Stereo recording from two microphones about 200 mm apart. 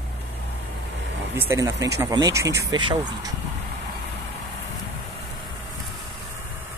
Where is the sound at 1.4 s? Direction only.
15° right (ahead or behind).